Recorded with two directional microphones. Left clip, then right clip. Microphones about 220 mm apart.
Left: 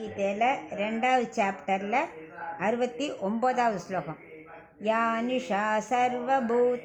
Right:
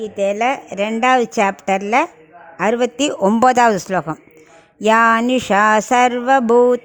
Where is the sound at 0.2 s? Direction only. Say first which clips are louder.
Right 9 dB; 50° right (ahead or behind).